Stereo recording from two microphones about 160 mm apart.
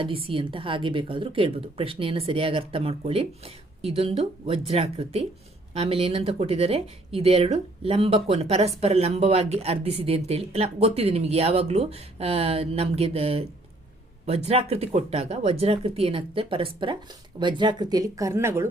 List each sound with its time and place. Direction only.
0.0 s speech: 35° right (ahead or behind); by 18.7 s 15° right (ahead or behind)